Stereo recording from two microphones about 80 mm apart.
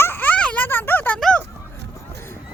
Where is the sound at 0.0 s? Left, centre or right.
Left.